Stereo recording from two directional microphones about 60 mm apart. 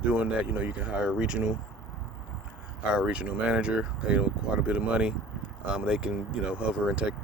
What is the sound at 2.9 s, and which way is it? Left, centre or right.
Speech, centre.